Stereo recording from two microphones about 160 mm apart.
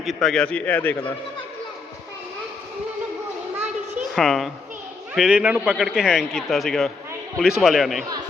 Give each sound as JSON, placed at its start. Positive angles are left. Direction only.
{"t": 0.0, "sound": "a man's voice", "side_deg": 0}
{"t": 4.1, "sound": "a man's voice", "side_deg": 0}